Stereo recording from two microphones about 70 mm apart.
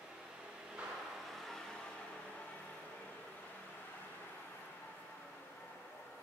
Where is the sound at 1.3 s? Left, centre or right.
Centre.